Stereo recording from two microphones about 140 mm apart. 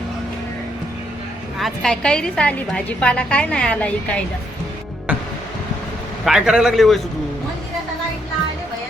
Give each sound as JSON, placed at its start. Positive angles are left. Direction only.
{"t": 1.5, "sound": "a woman's voice", "side_deg": 0}
{"t": 6.2, "sound": "a man's voice", "side_deg": -5}